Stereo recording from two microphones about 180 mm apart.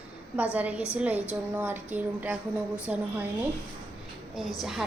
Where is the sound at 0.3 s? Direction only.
10° right (ahead or behind).